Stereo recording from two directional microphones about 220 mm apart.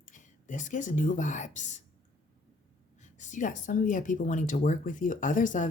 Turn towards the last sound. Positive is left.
turn(degrees=35)  # may be behind; listen again after turning